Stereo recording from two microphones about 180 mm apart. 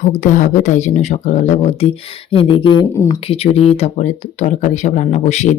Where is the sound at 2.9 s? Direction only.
15° left (ahead or behind).